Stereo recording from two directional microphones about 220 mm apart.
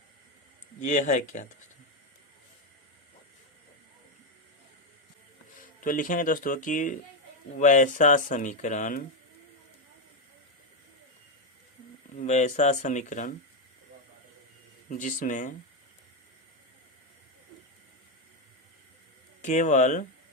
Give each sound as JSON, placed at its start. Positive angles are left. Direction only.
{"t": 0.8, "sound": "speech", "side_deg": 35}
{"t": 5.8, "sound": "speech", "side_deg": 40}
{"t": 12.2, "sound": "speech", "side_deg": 30}
{"t": 14.8, "sound": "speech", "side_deg": 35}
{"t": 19.4, "sound": "speech", "side_deg": 30}